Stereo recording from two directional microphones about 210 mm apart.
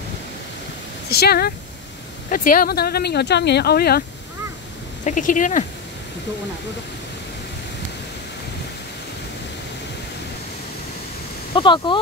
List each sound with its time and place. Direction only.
1.1 s speech: 50° left (ahead or behind)
5.0 s speech: 35° left (ahead or behind)
11.5 s speech: 20° left (ahead or behind)